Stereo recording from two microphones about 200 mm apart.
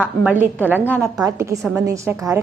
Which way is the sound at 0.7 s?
10° right (ahead or behind).